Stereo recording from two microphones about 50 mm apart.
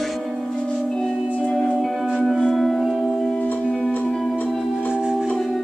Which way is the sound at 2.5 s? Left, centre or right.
Centre.